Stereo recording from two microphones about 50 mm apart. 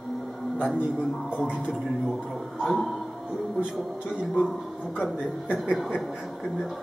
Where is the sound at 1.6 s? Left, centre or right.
Centre.